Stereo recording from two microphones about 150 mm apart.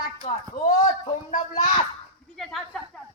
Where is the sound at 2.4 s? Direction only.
Centre (ahead or behind).